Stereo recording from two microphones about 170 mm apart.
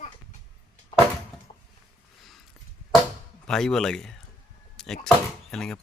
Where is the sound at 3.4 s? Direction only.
5° left (ahead or behind).